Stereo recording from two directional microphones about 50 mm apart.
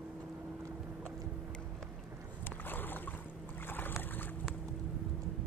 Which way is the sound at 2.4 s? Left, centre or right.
Left.